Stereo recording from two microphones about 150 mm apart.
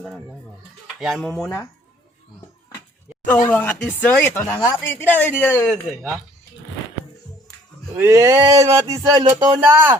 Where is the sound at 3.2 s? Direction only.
10° left (ahead or behind).